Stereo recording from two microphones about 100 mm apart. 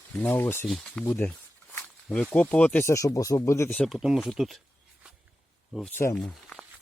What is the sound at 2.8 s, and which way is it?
Speech, 30° left (ahead or behind).